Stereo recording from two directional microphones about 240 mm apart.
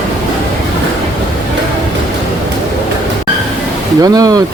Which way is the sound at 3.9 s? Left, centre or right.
Centre.